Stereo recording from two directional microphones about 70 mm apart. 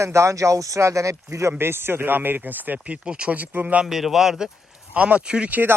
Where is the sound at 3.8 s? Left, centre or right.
Centre.